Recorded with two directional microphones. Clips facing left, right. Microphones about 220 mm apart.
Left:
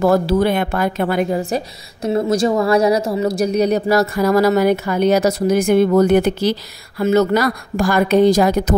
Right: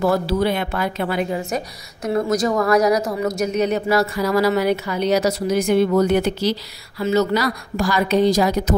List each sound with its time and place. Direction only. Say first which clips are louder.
0.0 s a woman's voice: left 4 dB; 50° left (ahead or behind)
1.4 s a woman's voice: left 4 dB; 30° left (ahead or behind); by 8.7 s 55° left (ahead or behind)